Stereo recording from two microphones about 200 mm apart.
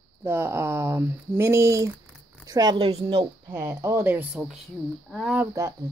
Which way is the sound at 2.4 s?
20° right (ahead or behind).